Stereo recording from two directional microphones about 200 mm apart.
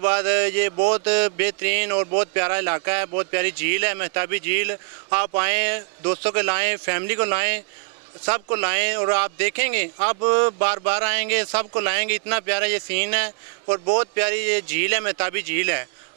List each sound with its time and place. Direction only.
0.0 s speech: 10° right (ahead or behind)